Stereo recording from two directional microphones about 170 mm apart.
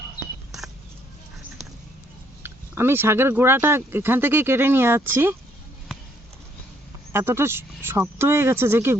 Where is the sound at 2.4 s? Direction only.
15° right (ahead or behind).